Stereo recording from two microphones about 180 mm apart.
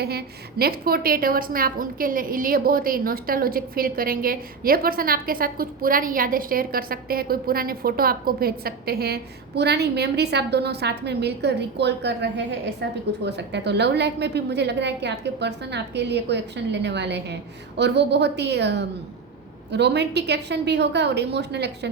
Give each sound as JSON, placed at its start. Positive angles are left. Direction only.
{"t": 0.0, "sound": "a woman's voice", "side_deg": -60}